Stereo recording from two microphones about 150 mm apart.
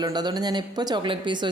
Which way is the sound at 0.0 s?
30° right (ahead or behind).